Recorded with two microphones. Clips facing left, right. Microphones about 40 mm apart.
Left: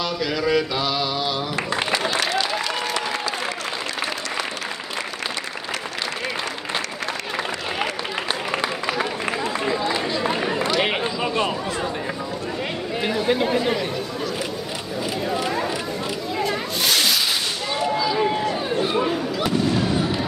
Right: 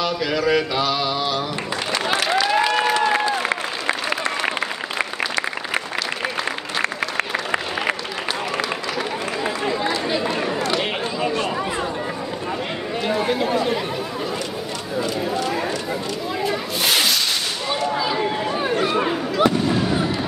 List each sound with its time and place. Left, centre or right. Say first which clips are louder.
0.5 s mantra: right 1 dB; centre
2.5 s applause: right 7 dB; right
6.8 s applause: right 5 dB; right
8.5 s a sound: even; left
10.8 s a sound: left 1 dB; left
13.3 s chatter: left 4 dB; centre
16.4 s snake: right 2 dB; centre
17.9 s run: left 1 dB; right
18.9 s fireworks: right 2 dB; centre